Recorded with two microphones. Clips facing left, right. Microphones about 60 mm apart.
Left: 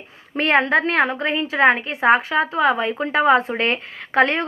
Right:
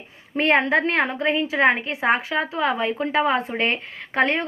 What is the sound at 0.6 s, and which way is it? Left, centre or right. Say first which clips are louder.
Speech: left 2 dB; left.